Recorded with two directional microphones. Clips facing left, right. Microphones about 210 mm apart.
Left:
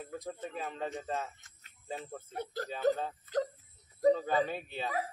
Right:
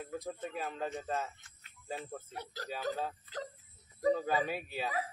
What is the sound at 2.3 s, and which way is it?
Speech, 50° left (ahead or behind).